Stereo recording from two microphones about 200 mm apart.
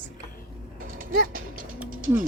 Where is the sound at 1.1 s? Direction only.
45° right (ahead or behind).